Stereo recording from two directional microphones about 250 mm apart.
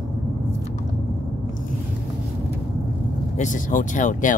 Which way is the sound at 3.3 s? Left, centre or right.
Left.